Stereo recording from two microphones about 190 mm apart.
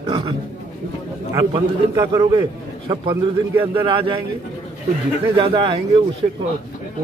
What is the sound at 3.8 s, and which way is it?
Speech, 25° right (ahead or behind).